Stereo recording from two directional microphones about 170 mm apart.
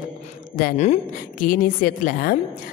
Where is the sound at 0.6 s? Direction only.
60° left (ahead or behind).